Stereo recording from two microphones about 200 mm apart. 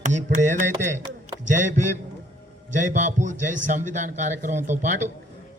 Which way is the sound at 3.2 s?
40° right (ahead or behind).